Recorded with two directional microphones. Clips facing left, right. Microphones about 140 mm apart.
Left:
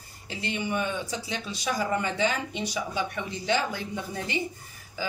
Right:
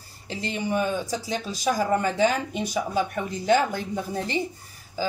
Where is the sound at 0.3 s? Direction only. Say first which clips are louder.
Right 3 dB; 35° right (ahead or behind).